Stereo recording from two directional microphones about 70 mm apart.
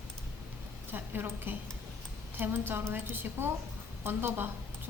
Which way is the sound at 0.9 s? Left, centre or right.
Right.